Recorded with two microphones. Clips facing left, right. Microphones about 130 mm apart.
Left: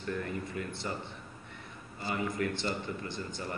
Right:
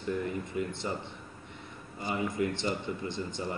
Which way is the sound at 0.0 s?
20° right (ahead or behind).